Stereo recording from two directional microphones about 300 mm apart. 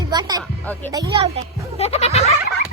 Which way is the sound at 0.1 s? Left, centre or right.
Centre.